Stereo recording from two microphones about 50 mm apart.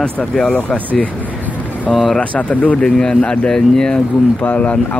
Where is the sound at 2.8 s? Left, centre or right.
Centre.